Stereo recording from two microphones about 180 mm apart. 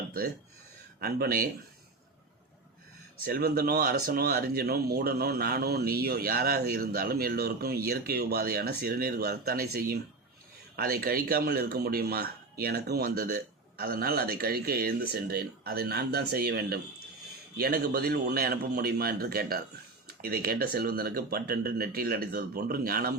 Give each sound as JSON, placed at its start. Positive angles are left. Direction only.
{"t": 0.9, "sound": "speech", "side_deg": -60}
{"t": 3.2, "sound": "speech", "side_deg": -55}